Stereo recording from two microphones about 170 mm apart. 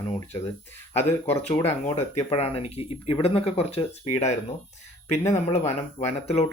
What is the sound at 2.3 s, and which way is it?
Speech, 35° left (ahead or behind).